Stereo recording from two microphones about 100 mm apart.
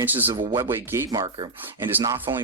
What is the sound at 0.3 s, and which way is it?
Speech, 55° right (ahead or behind).